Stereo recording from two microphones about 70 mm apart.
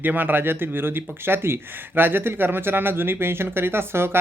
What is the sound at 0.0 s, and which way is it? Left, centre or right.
Speech, right.